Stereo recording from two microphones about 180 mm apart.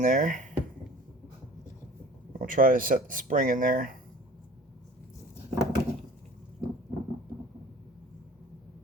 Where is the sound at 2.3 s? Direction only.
50° right (ahead or behind).